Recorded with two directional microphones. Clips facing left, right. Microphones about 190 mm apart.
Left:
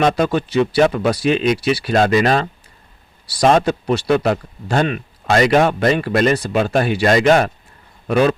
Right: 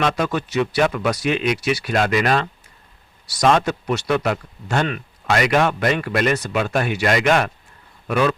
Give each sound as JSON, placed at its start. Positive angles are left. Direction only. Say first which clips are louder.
{"t": 0.0, "sound": "a man's voice", "louder": "left 5 dB", "side_deg": 35}